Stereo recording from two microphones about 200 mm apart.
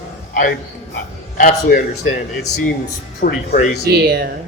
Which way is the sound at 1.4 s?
40° left (ahead or behind).